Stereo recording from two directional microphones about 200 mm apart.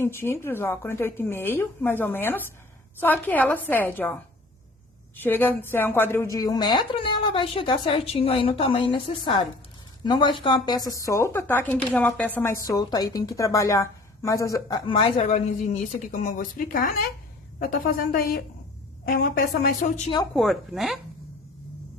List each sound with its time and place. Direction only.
0.0 s a woman's voice: 10° left (ahead or behind); by 19.9 s 45° left (ahead or behind)
20.3 s a woman's voice: centre (ahead or behind)